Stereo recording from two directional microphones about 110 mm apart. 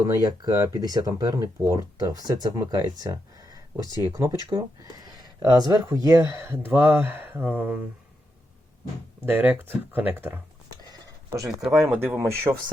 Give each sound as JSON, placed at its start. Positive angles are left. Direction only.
{"t": 0.0, "sound": "speech", "side_deg": -35}
{"t": 4.4, "sound": "speech", "side_deg": -45}
{"t": 6.1, "sound": "speech", "side_deg": -20}
{"t": 9.2, "sound": "speech", "side_deg": -15}
{"t": 10.8, "sound": "a sound", "side_deg": -35}
{"t": 11.6, "sound": "speech", "side_deg": -5}
{"t": 11.9, "sound": "speech", "side_deg": -20}